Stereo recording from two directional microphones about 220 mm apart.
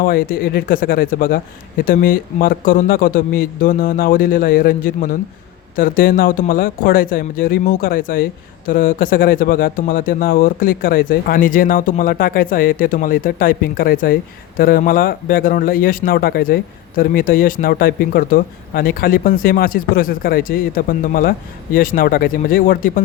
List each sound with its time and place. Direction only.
0.0 s speech: 40° left (ahead or behind)